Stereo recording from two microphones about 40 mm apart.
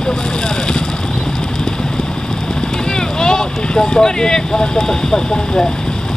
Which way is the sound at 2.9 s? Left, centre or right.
Centre.